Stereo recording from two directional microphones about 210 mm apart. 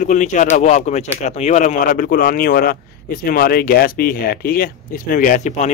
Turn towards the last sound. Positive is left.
turn(degrees=35)  # may be behind; listen again after turning